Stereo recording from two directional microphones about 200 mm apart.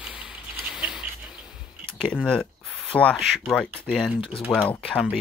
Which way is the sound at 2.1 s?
Centre (ahead or behind).